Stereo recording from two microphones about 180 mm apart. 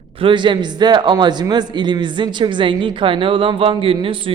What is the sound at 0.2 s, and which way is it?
A man's voice, 25° right (ahead or behind).